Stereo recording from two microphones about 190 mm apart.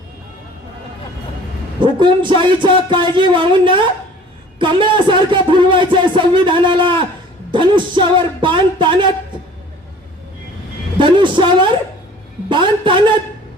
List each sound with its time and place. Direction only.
1.8 s music: 25° right (ahead or behind)
10.9 s a woman's voice: 25° right (ahead or behind)
12.5 s music: 25° right (ahead or behind)